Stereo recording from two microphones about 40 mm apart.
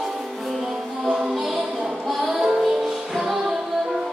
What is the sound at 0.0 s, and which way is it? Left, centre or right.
Music, centre.